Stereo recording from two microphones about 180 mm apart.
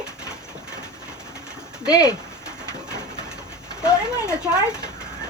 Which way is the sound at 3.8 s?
5° right (ahead or behind).